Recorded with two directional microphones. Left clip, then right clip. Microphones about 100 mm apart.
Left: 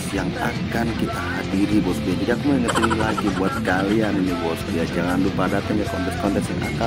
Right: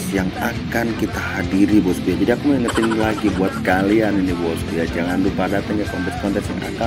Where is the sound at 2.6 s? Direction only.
Centre (ahead or behind).